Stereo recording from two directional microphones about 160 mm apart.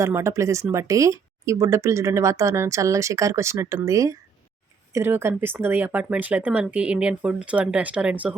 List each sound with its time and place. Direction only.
0.0 s speech: 15° right (ahead or behind)